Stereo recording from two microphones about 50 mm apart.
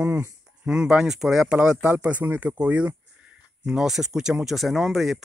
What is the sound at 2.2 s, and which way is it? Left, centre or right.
Speech, right.